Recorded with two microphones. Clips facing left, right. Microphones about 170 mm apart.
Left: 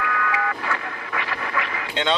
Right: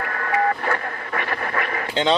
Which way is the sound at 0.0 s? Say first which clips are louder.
Right 3 dB; 40° right (ahead or behind).